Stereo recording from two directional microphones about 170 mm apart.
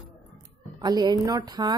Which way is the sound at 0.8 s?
25° right (ahead or behind).